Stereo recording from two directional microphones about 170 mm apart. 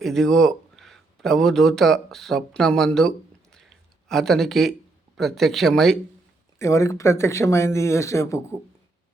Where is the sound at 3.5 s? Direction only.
5° left (ahead or behind).